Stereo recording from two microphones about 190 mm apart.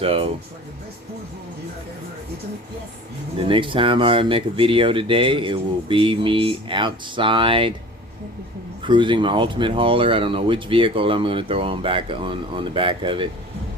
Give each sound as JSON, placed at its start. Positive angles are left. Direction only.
{"t": 0.0, "sound": "speech", "side_deg": -30}
{"t": 3.5, "sound": "speech", "side_deg": -25}
{"t": 8.8, "sound": "speech", "side_deg": -25}